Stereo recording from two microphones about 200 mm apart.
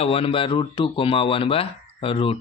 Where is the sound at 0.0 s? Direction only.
30° left (ahead or behind).